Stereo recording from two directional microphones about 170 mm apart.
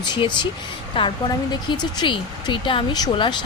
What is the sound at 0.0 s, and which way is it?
A woman's voice, 25° left (ahead or behind).